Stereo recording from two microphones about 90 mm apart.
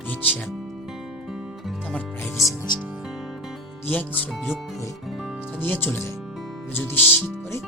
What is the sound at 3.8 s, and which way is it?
Speech, 20° left (ahead or behind).